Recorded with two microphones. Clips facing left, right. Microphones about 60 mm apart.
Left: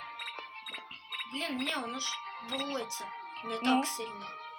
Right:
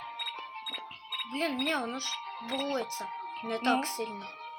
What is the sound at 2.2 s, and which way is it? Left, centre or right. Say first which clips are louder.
Music: right 2 dB; left.